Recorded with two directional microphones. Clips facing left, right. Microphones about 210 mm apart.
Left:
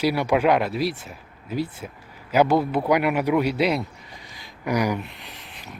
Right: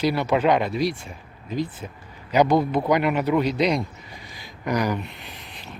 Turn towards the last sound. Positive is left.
turn(degrees=0)  # may be behind; listen again after turning